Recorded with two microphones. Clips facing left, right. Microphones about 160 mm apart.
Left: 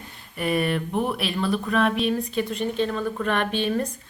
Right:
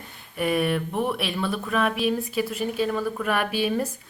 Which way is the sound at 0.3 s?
Centre (ahead or behind).